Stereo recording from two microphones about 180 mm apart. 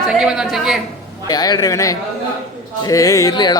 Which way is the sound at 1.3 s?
20° left (ahead or behind).